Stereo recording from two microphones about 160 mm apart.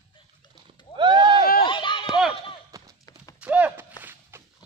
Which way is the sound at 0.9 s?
30° right (ahead or behind).